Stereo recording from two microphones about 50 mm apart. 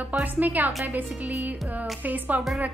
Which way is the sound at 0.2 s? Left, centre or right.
Right.